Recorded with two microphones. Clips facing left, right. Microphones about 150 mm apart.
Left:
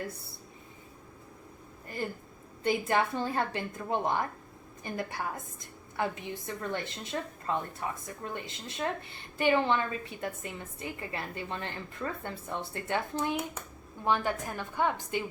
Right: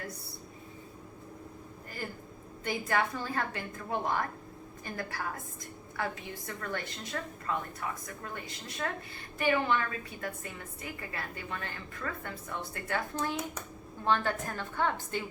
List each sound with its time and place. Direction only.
2.0 s a sound: 25° left (ahead or behind)
2.6 s a woman's voice: 25° left (ahead or behind)
13.1 s a woman's voice: 10° left (ahead or behind)